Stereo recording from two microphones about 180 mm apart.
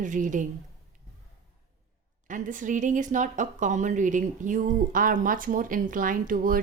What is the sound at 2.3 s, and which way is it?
A woman's voice, 45° right (ahead or behind).